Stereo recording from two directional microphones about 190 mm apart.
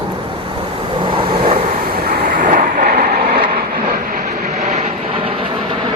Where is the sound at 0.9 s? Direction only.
25° right (ahead or behind).